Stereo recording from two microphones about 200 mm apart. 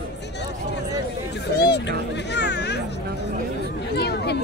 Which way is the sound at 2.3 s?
60° left (ahead or behind).